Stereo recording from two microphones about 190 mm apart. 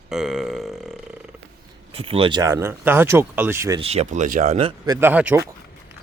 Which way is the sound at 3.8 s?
35° right (ahead or behind).